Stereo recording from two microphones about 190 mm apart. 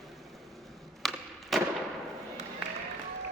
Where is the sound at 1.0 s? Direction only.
Centre (ahead or behind).